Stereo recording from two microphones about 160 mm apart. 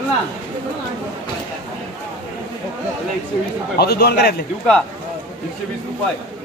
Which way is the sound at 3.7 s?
80° left.